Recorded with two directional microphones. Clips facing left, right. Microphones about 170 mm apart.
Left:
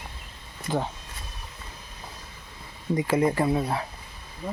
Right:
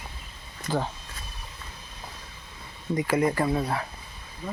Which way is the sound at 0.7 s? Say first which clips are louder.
Even; 20° left (ahead or behind).